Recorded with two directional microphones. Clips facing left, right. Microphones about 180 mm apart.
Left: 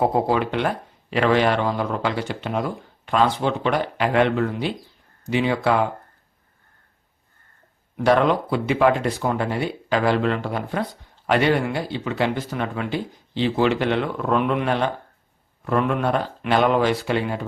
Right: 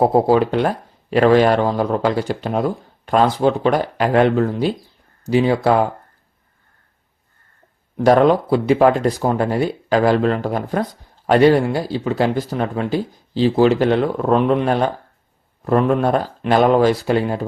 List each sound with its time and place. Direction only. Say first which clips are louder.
0.0 s speech: right 6 dB; 35° right (ahead or behind)
8.0 s speech: right 5 dB; 40° right (ahead or behind)